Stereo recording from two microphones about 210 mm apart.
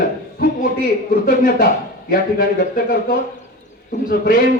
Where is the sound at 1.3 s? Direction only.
45° left (ahead or behind).